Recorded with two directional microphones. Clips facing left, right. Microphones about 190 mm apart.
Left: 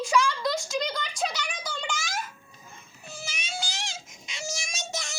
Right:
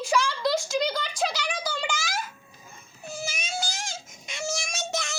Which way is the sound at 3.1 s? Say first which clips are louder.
Right 5 dB; 45° right (ahead or behind).